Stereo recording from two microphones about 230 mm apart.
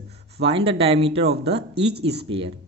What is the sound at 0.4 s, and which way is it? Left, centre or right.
Speech, right.